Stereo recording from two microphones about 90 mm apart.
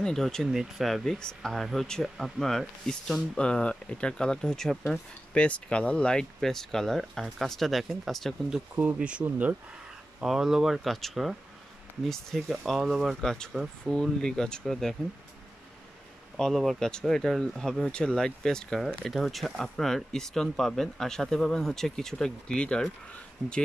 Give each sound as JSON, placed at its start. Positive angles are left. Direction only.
{"t": 0.0, "sound": "speech", "side_deg": 5}
{"t": 8.7, "sound": "speech", "side_deg": -15}
{"t": 10.2, "sound": "speech", "side_deg": -5}
{"t": 16.3, "sound": "speech", "side_deg": 5}